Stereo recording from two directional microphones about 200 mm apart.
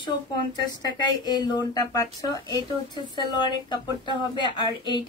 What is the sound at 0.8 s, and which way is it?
A woman's voice, 20° left (ahead or behind).